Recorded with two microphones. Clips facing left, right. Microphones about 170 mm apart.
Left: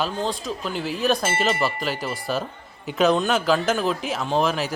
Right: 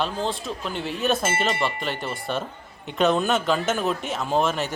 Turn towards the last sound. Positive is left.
turn(degrees=0)  # may be behind; listen again after turning